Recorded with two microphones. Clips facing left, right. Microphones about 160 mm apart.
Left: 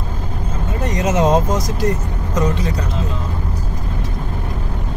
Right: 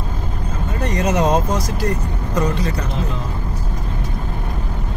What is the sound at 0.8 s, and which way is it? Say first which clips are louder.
Speech: left 1 dB; 20° left (ahead or behind).